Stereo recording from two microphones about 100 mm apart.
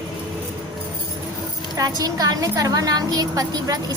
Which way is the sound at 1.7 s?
40° right (ahead or behind).